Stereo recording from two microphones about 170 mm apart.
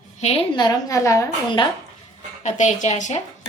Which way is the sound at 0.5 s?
25° left (ahead or behind).